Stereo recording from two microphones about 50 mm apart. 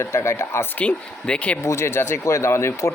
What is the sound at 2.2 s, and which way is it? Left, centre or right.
Speech, left.